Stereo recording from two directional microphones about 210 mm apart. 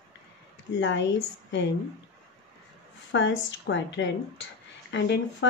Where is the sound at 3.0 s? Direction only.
60° left (ahead or behind).